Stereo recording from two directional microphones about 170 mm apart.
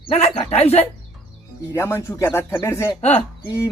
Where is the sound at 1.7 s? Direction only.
15° left (ahead or behind).